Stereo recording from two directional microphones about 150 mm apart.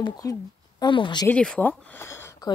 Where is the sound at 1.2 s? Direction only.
10° left (ahead or behind).